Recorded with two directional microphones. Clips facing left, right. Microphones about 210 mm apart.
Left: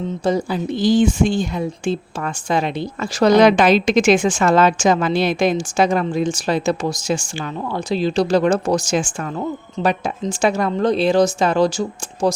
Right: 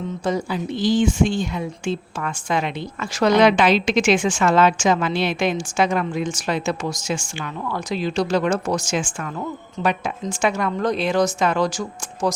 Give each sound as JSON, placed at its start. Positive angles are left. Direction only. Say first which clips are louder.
{"t": 0.3, "sound": "speech", "louder": "left 4 dB", "side_deg": 35}